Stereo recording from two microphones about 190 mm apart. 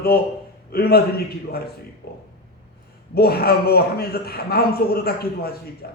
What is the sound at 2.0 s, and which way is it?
A man's voice, 55° left (ahead or behind).